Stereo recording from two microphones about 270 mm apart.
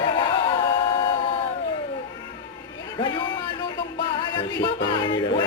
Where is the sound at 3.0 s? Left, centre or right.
Centre.